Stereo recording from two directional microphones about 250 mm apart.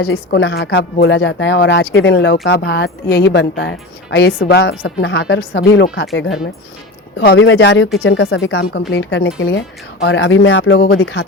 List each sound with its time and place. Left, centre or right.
0.0 s speech: left
7.2 s speech: left